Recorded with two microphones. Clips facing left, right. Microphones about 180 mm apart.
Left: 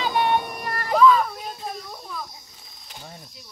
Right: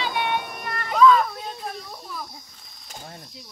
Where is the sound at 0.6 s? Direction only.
35° left (ahead or behind).